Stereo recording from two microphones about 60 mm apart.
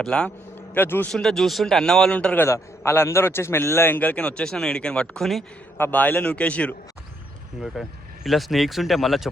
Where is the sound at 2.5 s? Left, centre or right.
Left.